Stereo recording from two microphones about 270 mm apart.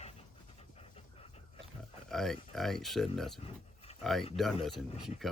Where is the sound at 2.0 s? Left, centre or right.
Centre.